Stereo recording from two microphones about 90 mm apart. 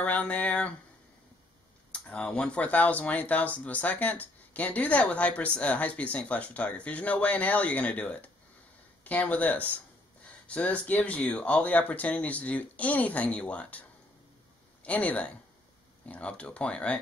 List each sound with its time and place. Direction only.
0.0 s speech: 20° left (ahead or behind)
1.9 s speech: 10° left (ahead or behind)